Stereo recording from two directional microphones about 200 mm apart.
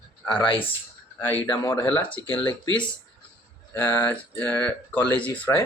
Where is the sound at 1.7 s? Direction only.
10° left (ahead or behind).